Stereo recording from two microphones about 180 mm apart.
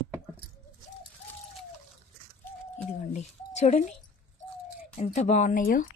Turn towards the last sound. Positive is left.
turn(degrees=50)  # may be behind; listen again after turning